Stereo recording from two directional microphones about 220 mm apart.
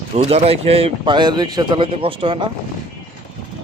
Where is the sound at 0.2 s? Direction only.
25° right (ahead or behind).